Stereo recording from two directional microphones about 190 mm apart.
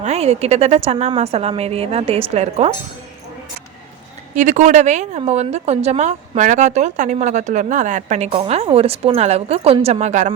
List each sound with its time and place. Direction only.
0.0 s a woman's voice: 35° right (ahead or behind)
4.4 s a woman's voice: 40° right (ahead or behind)